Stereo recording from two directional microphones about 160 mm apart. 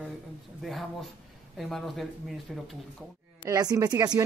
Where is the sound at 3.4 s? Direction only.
20° right (ahead or behind).